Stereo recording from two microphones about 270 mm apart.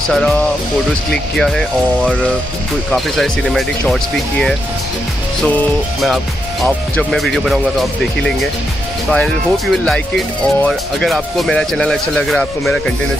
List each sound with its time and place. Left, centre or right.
0.1 s speech: centre